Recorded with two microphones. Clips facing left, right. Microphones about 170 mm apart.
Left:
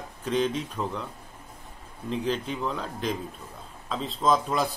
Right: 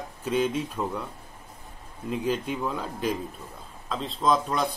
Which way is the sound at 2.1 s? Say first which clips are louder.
Right 1 dB; 10° right (ahead or behind).